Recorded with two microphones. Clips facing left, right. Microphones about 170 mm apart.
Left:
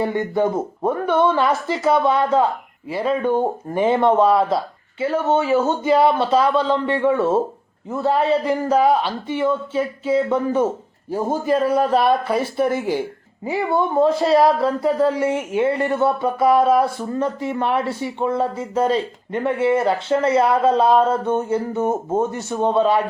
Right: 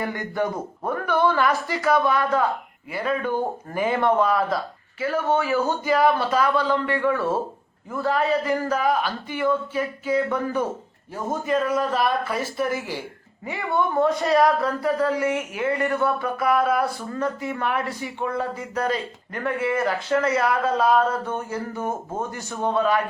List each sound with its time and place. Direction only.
0.0 s a man's voice: 25° left (ahead or behind)